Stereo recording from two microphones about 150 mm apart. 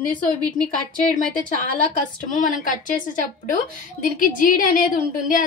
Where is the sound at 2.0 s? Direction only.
60° left (ahead or behind).